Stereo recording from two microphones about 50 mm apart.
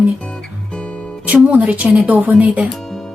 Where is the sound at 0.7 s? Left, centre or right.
Left.